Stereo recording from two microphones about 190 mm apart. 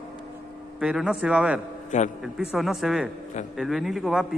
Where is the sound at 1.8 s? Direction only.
40° left (ahead or behind).